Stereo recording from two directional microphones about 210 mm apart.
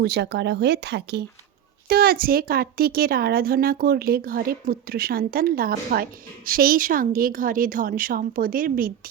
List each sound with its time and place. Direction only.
0.0 s a woman's voice: 50° right (ahead or behind)